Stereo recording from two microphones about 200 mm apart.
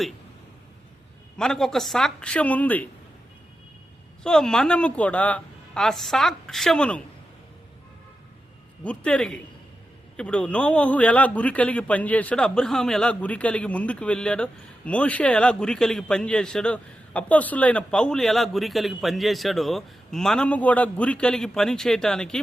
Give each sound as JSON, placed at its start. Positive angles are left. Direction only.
{"t": 1.4, "sound": "a man's voice", "side_deg": 0}
{"t": 4.2, "sound": "a man's voice", "side_deg": 5}
{"t": 8.8, "sound": "a man's voice", "side_deg": 5}